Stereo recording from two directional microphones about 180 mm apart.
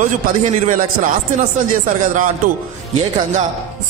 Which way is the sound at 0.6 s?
50° right (ahead or behind).